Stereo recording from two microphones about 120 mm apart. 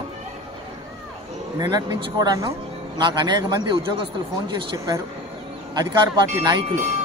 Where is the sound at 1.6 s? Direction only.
35° right (ahead or behind).